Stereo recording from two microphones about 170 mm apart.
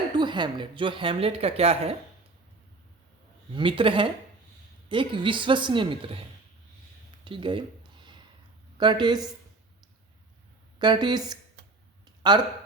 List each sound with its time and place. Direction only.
0.1 s a woman's voice: 25° right (ahead or behind)
3.5 s a woman's voice: 30° right (ahead or behind)
7.3 s a sound: 30° right (ahead or behind)
8.8 s a woman's voice: 25° right (ahead or behind)
10.8 s a woman's voice: 25° right (ahead or behind)